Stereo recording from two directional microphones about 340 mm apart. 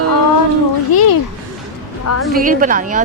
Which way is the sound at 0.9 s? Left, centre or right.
Left.